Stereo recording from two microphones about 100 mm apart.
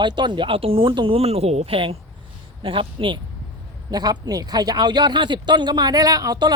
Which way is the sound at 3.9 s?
40° right (ahead or behind).